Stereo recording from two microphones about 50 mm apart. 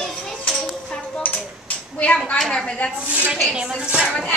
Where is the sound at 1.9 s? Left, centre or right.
Left.